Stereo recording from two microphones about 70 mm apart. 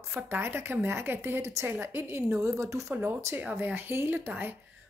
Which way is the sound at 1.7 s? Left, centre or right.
Right.